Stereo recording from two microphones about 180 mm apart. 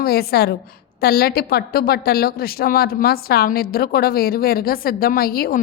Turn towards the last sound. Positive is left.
turn(degrees=55)  # may be behind; listen again after turning